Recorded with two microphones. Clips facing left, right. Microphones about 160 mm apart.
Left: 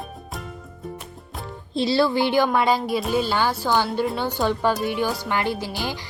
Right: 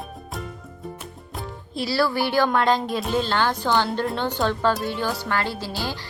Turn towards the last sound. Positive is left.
turn(degrees=15)  # may be behind; listen again after turning